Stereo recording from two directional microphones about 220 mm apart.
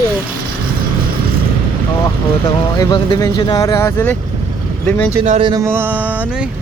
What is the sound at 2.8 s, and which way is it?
Speech, 20° left (ahead or behind).